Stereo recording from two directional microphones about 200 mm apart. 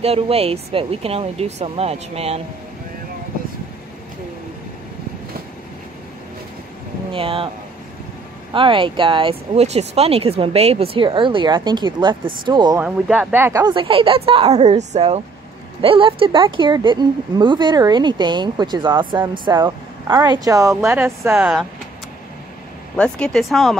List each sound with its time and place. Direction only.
0.0 s speech: 30° right (ahead or behind)
7.1 s speech: 25° right (ahead or behind)
8.5 s speech: 25° right (ahead or behind)
12.8 s speech: 10° right (ahead or behind)
22.9 s speech: 5° left (ahead or behind)